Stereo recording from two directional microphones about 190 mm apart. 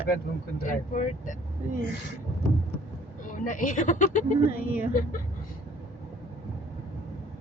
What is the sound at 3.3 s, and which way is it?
Speech, 45° left (ahead or behind).